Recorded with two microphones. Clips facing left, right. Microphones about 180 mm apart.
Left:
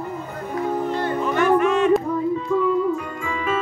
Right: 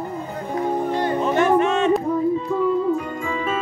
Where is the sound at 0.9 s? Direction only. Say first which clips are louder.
Right 2 dB; 15° right (ahead or behind).